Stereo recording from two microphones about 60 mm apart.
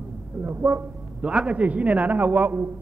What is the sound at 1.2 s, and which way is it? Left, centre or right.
A man's voice, centre.